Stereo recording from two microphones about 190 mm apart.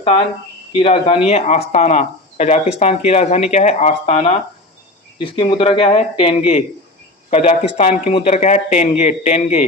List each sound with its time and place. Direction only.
0.8 s speech: 30° left (ahead or behind)